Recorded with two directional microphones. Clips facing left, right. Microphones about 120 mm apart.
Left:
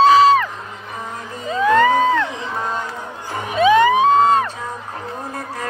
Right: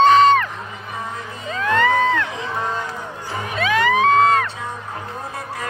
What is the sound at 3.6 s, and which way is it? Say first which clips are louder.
Music: left 6 dB; 20° left (ahead or behind).